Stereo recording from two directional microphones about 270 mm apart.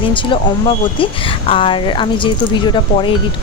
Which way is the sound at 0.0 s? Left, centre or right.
Centre.